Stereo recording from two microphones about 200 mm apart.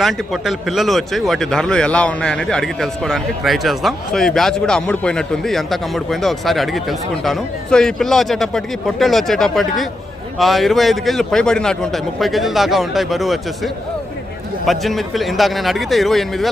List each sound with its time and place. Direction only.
0.0 s speech: centre (ahead or behind)
14.7 s speech: centre (ahead or behind)